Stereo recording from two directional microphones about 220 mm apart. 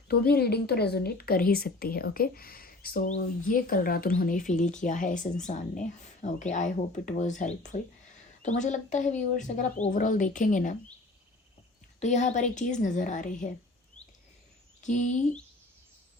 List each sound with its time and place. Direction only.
0.1 s a woman's voice: 45° left (ahead or behind)
11.9 s a woman's voice: 30° left (ahead or behind)
14.8 s a woman's voice: 35° left (ahead or behind)